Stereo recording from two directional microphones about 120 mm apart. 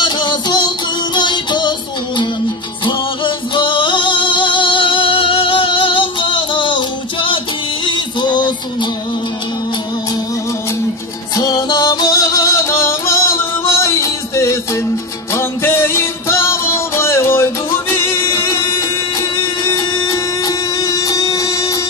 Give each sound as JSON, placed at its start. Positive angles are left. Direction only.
{"t": 0.0, "sound": "music", "side_deg": 35}
{"t": 2.8, "sound": "music", "side_deg": 40}
{"t": 11.3, "sound": "music", "side_deg": 35}